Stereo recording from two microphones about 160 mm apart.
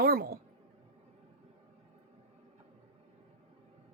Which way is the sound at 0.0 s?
70° right (ahead or behind).